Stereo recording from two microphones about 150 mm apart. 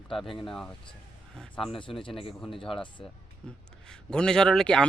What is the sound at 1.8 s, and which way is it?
Speech, 35° left (ahead or behind).